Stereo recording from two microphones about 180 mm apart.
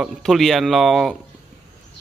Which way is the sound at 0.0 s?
Centre (ahead or behind).